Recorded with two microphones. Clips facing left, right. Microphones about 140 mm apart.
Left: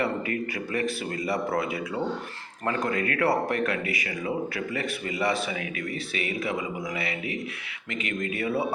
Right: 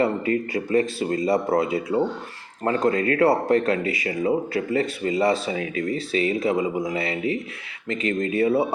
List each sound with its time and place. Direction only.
0.0 s speech: 25° right (ahead or behind)